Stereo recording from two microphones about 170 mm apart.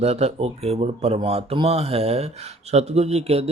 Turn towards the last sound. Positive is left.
turn(degrees=-40)  # may be behind; listen again after turning